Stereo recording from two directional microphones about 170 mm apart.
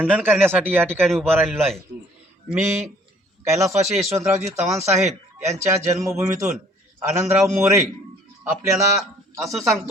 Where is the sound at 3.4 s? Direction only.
15° right (ahead or behind).